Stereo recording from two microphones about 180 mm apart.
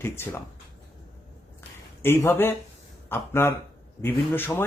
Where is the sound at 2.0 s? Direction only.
15° left (ahead or behind).